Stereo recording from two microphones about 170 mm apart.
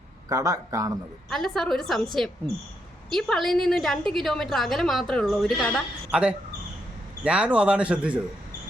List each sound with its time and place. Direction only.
0.3 s speech: 20° right (ahead or behind)
1.3 s a woman's voice: centre (ahead or behind)
6.1 s speech: 5° right (ahead or behind)